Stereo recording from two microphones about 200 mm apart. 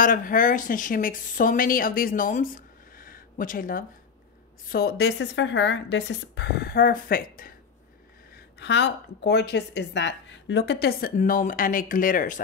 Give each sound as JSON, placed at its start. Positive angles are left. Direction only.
{"t": 0.0, "sound": "a woman's voice", "side_deg": 40}
{"t": 8.5, "sound": "a woman's voice", "side_deg": 60}